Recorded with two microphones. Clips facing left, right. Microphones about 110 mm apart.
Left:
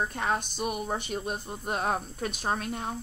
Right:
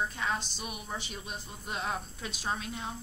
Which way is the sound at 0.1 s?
55° left (ahead or behind).